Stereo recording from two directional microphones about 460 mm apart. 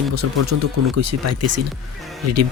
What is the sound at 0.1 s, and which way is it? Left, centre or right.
Speech, right.